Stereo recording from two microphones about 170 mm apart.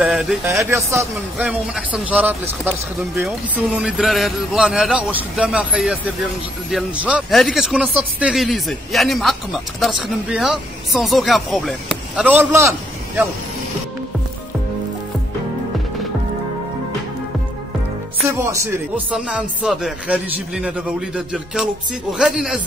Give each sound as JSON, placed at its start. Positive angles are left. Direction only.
{"t": 0.0, "sound": "a sound", "side_deg": 0}
{"t": 0.5, "sound": "speech", "side_deg": -15}
{"t": 1.5, "sound": "a man's voice", "side_deg": -5}
{"t": 18.4, "sound": "speech", "side_deg": -15}
{"t": 19.1, "sound": "speech", "side_deg": -5}